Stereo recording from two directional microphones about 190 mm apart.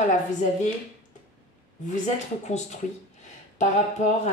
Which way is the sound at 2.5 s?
35° left (ahead or behind).